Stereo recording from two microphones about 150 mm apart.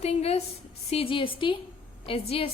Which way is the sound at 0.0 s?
45° left (ahead or behind).